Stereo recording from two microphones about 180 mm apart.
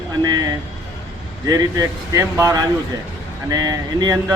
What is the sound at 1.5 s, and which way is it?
A man's voice, 20° right (ahead or behind).